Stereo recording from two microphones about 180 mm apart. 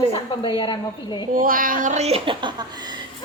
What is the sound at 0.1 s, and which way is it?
A woman's voice, 30° left (ahead or behind).